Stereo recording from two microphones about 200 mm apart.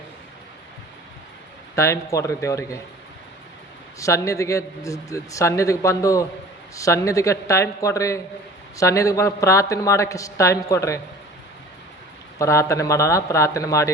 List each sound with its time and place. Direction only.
1.7 s a man's voice: 15° left (ahead or behind)
4.0 s a man's voice: 15° left (ahead or behind)
12.4 s a man's voice: 15° left (ahead or behind)